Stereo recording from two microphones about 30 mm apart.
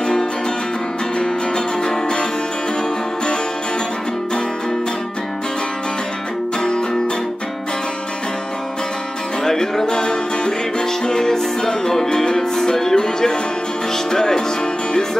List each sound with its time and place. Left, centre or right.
0.0 s music: left
6.6 s music: left
9.4 s music: centre